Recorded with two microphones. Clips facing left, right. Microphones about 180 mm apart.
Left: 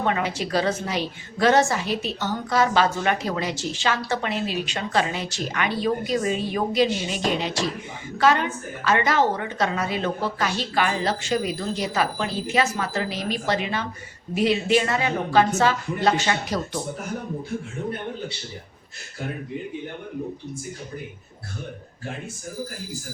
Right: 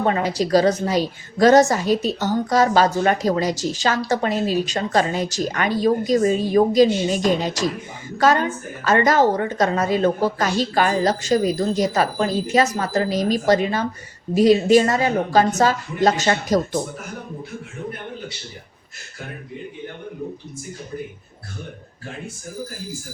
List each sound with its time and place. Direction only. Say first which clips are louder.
0.0 s a woman's voice: right 4 dB; 40° right (ahead or behind)